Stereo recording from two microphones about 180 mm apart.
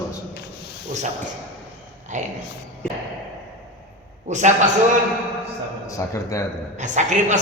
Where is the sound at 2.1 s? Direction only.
40° right (ahead or behind).